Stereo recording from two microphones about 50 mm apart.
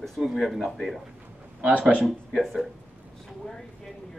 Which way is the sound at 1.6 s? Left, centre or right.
Right.